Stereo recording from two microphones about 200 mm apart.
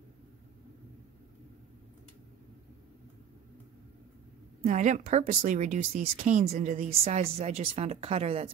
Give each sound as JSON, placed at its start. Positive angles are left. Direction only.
{"t": 4.6, "sound": "speech", "side_deg": -35}